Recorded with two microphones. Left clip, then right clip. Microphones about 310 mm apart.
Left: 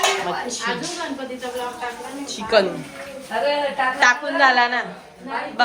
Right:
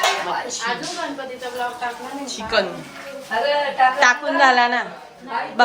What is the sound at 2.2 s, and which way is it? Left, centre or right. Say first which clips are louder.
Speech: left 3 dB; centre.